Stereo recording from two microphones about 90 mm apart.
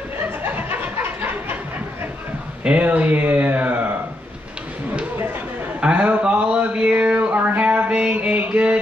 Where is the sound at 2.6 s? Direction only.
15° right (ahead or behind).